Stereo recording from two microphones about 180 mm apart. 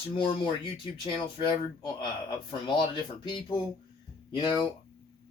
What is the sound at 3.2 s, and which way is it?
Speech, 25° left (ahead or behind).